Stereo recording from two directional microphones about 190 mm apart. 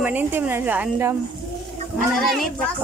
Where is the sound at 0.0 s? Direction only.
10° right (ahead or behind).